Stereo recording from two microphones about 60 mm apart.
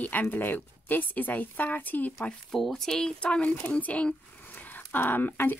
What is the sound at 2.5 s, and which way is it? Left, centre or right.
Speech, centre.